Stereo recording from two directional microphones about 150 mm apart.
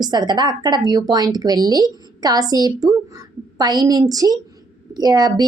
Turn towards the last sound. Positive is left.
turn(degrees=-25)  # may be behind; listen again after turning